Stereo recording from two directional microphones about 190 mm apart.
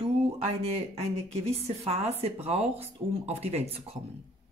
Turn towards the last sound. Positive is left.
turn(degrees=-35)  # may be behind; listen again after turning